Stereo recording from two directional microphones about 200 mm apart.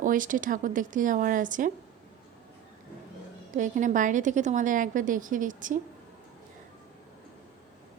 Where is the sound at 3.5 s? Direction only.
40° right (ahead or behind).